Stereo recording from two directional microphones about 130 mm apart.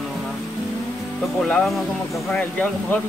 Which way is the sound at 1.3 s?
5° left (ahead or behind).